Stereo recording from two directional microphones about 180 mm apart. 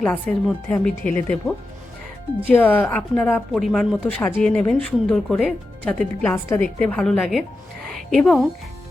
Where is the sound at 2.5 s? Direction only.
10° left (ahead or behind).